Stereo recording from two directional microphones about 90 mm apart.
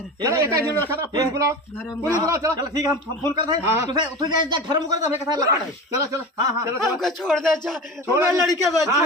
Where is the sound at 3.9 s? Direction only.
55° right (ahead or behind).